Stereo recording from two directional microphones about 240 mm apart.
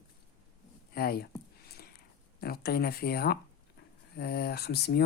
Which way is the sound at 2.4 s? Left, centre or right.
Left.